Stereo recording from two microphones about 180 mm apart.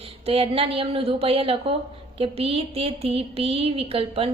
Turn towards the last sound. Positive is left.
turn(degrees=-30)  # may be behind; listen again after turning